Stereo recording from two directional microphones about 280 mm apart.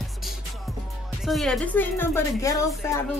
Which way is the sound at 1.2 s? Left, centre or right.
Centre.